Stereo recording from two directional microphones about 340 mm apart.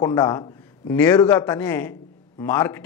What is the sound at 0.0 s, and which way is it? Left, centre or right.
A man's voice, centre.